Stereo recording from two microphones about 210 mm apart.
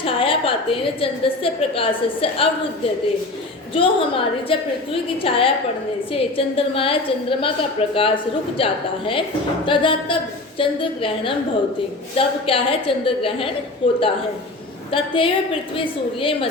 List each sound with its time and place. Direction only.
0.0 s a woman's voice: 25° left (ahead or behind)
3.8 s a woman's voice: 25° left (ahead or behind)